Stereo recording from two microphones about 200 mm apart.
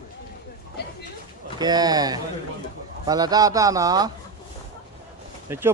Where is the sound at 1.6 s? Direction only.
20° right (ahead or behind).